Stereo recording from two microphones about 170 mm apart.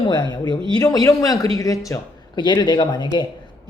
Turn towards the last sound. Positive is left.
turn(degrees=25)  # may be behind; listen again after turning